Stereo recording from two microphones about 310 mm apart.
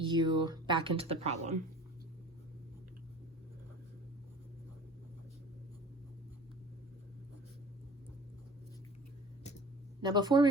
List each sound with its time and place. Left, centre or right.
0.0 s speech: centre
10.0 s a woman's voice: centre